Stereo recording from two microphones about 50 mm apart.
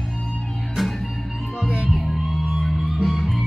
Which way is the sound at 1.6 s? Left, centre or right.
Right.